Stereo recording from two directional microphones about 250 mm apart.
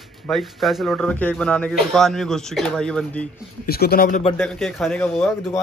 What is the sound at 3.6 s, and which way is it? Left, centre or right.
Speech, left.